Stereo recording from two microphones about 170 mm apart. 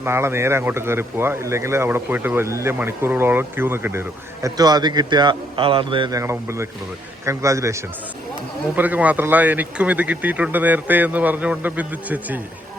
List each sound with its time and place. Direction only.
0.0 s speech: 15° right (ahead or behind)
4.4 s a man's voice: 25° right (ahead or behind)